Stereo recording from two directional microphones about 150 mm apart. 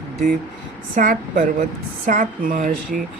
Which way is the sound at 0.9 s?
60° right (ahead or behind).